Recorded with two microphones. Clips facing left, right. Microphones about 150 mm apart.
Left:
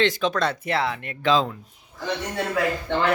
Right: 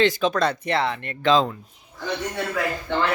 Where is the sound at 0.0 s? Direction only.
Centre (ahead or behind).